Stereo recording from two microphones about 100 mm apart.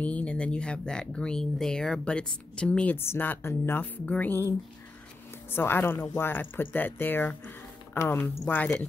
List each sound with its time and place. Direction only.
0.0 s speech: 15° left (ahead or behind)
5.5 s speech: 20° left (ahead or behind)